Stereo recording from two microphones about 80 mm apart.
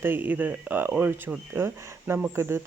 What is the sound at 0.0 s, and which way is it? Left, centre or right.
Speech, right.